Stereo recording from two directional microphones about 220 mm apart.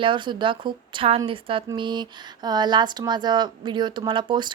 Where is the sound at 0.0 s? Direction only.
20° right (ahead or behind).